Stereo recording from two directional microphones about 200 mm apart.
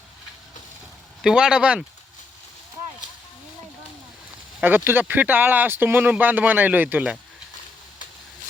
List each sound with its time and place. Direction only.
1.2 s speech: 5° right (ahead or behind)
4.6 s speech: 10° right (ahead or behind)